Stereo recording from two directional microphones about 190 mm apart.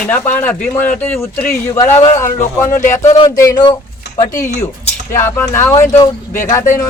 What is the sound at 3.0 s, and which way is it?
Speech, 35° left (ahead or behind).